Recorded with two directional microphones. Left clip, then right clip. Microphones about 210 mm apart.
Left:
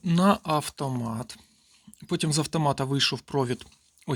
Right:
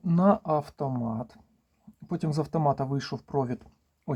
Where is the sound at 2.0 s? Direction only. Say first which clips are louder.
Left 3 dB; 20° left (ahead or behind).